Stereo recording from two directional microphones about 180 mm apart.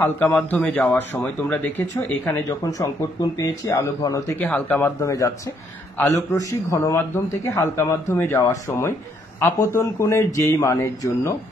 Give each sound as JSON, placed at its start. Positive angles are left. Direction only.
{"t": 0.0, "sound": "a man's voice", "side_deg": 10}